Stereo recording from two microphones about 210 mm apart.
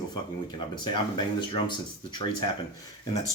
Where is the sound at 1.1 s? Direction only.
20° left (ahead or behind).